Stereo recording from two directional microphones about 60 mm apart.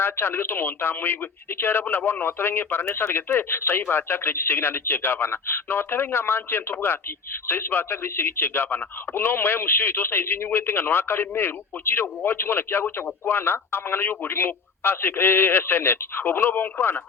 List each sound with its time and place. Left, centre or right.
0.0 s speech: left